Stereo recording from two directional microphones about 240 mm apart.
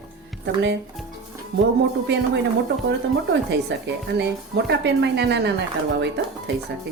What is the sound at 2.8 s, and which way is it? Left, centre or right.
Speech, right.